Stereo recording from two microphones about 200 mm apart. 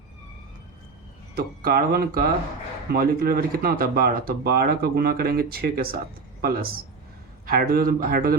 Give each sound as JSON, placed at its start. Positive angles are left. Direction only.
{"t": 1.4, "sound": "speech", "side_deg": -50}